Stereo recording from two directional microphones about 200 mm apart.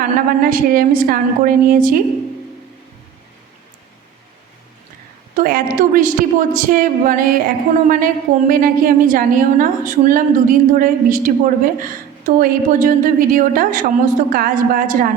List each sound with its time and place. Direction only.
0.0 s a woman's voice: 45° right (ahead or behind)
5.4 s a woman's voice: 45° right (ahead or behind)